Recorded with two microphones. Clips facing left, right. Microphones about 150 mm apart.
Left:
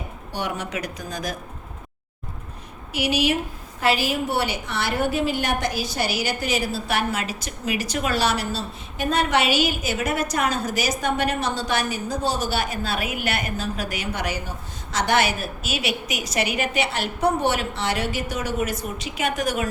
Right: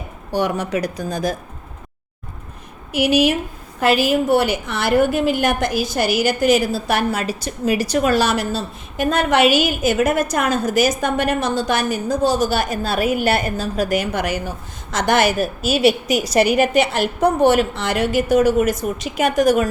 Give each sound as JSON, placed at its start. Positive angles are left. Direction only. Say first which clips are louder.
{"t": 0.3, "sound": "a woman's voice", "louder": "right 8 dB", "side_deg": -40}
{"t": 2.9, "sound": "a woman's voice", "louder": "right 6 dB", "side_deg": -50}